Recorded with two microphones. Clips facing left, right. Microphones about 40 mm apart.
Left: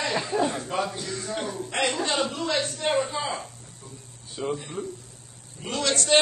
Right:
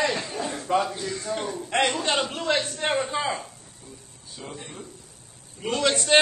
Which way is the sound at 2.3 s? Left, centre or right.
Right.